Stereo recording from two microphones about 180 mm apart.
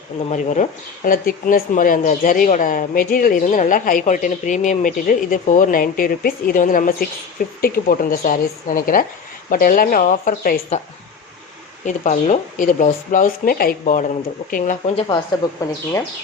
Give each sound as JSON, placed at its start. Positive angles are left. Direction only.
{"t": 0.3, "sound": "speech", "side_deg": 40}
{"t": 11.9, "sound": "speech", "side_deg": 45}
{"t": 14.6, "sound": "speech", "side_deg": 35}
{"t": 15.4, "sound": "speech", "side_deg": 20}